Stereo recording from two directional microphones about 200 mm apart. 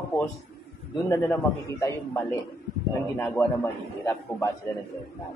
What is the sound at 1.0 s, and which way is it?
A man's voice, 15° left (ahead or behind).